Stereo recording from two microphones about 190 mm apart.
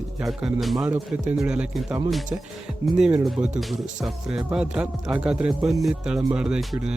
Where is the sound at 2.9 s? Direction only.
5° right (ahead or behind).